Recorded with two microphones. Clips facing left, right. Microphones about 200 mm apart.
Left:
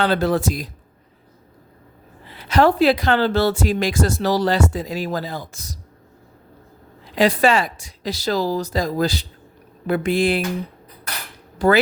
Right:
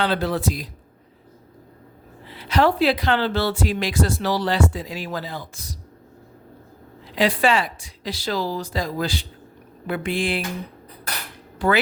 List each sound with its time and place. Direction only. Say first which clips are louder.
0.0 s speech: left 4 dB; 45° left (ahead or behind)
2.4 s speech: left 3 dB; 45° left (ahead or behind)
7.2 s speech: left 3 dB; 45° left (ahead or behind)
11.6 s speech: left 4 dB; 40° left (ahead or behind)